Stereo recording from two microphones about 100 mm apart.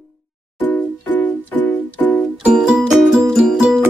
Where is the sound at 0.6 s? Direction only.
15° left (ahead or behind).